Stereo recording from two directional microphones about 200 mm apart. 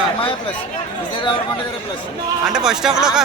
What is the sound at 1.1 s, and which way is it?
Speech, 25° left (ahead or behind).